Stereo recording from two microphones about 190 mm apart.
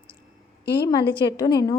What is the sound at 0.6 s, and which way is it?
Speech, 60° left (ahead or behind).